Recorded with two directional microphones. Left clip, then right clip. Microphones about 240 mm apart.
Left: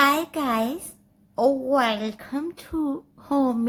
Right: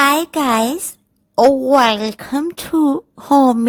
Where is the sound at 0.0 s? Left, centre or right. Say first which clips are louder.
Right 7 dB; right.